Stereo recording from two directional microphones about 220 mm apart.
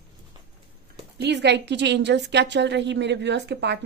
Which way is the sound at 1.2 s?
50° right (ahead or behind).